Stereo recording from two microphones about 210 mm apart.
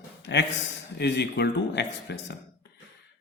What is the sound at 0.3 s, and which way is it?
A man's voice, 55° left (ahead or behind).